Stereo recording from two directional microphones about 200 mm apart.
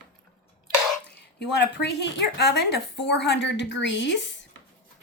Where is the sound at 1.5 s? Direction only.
60° left (ahead or behind).